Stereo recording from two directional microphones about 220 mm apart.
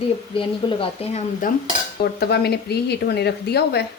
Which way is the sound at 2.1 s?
45° left (ahead or behind).